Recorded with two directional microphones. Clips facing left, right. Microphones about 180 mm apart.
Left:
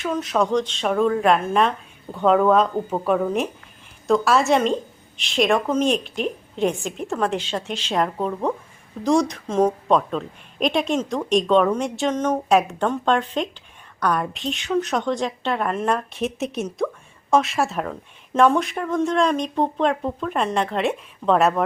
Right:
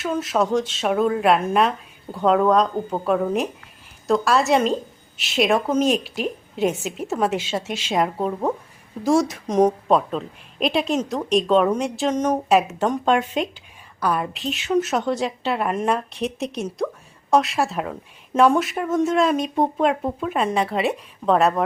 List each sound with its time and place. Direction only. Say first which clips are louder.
0.0 s a woman's voice: even; centre (ahead or behind)
9.5 s a woman's voice: right 2 dB; 15° right (ahead or behind)
9.9 s a woman's voice: even; 5° right (ahead or behind)
16.0 s speech: left 1 dB; centre (ahead or behind)